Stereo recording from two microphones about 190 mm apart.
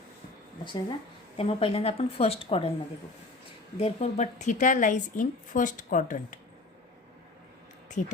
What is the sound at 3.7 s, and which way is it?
Speech, 35° left (ahead or behind).